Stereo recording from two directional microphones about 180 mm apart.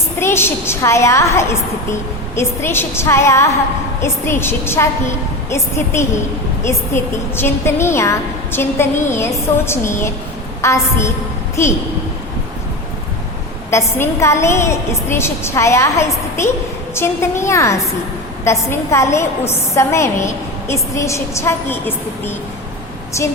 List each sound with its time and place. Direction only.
0.2 s a woman's voice: 15° left (ahead or behind)
13.7 s a woman's voice: 15° left (ahead or behind)